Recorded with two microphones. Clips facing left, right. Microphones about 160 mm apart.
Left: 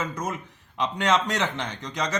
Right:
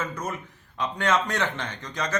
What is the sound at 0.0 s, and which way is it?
Speech, 15° left (ahead or behind).